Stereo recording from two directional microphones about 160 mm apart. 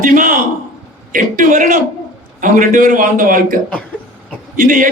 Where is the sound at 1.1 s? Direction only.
55° right (ahead or behind).